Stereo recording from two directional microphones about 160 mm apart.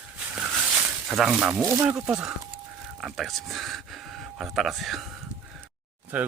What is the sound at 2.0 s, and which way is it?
Speech, 5° right (ahead or behind).